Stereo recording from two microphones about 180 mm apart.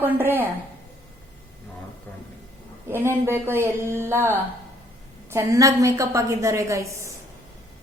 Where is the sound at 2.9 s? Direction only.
15° right (ahead or behind).